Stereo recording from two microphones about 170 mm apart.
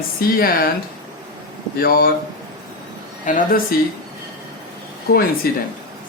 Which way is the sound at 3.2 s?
50° left (ahead or behind).